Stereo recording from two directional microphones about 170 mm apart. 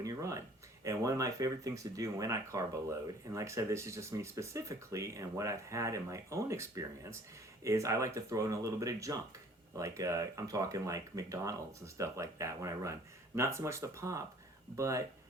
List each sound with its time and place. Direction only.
0.0 s speech: 20° right (ahead or behind)